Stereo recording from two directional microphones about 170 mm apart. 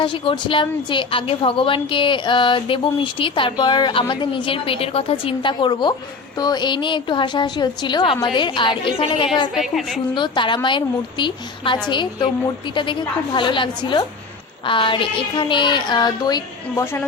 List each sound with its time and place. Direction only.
0.0 s a woman's voice: 30° left (ahead or behind)
9.6 s a woman's voice: centre (ahead or behind)
10.2 s a woman's voice: 30° left (ahead or behind)